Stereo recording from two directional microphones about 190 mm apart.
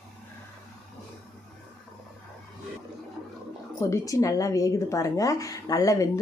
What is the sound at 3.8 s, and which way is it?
A woman's voice, 15° left (ahead or behind).